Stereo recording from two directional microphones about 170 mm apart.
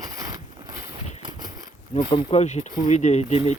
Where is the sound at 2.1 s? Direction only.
35° left (ahead or behind).